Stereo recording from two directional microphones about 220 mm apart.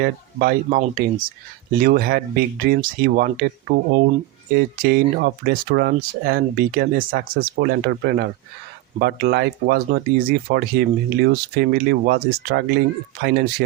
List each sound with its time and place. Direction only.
0.0 s speech: 40° right (ahead or behind)